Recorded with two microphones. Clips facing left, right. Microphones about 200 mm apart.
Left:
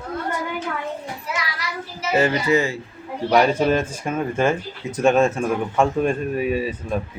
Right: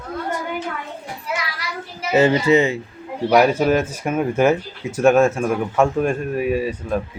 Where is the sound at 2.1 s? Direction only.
25° right (ahead or behind).